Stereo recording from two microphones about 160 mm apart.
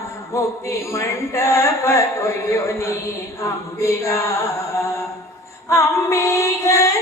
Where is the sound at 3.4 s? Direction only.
20° left (ahead or behind).